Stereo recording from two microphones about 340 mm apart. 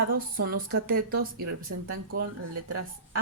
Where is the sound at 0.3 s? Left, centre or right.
Right.